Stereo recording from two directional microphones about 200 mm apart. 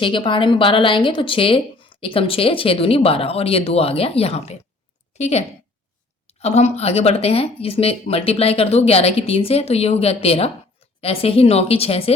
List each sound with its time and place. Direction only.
0.0 s a woman's voice: 25° left (ahead or behind)